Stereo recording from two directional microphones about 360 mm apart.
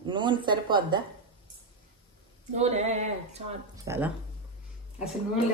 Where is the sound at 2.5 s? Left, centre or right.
Centre.